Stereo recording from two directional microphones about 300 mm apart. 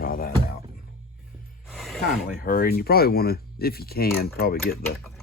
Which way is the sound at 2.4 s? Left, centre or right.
Left.